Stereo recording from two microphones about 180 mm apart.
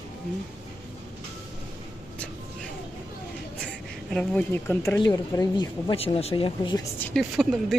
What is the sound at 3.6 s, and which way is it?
Speech, 5° left (ahead or behind).